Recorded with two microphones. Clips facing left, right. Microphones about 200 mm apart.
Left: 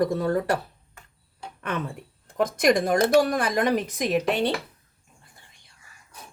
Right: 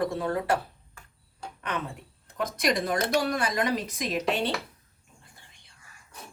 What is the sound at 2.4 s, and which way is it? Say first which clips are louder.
Speech: left 6 dB; 50° left (ahead or behind).